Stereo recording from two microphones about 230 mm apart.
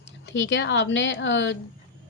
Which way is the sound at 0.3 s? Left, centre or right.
Left.